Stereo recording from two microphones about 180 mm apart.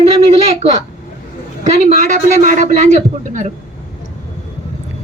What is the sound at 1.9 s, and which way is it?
Speech, 45° right (ahead or behind).